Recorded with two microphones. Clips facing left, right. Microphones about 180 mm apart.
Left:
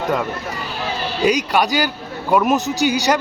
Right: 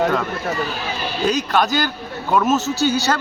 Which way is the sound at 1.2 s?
10° left (ahead or behind).